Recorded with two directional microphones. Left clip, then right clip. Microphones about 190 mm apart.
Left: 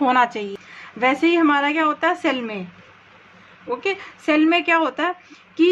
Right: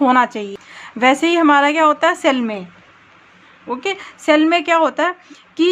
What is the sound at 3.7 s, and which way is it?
A woman's voice, 25° right (ahead or behind).